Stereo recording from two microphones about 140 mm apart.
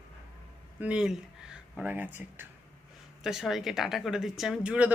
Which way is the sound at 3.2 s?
Centre (ahead or behind).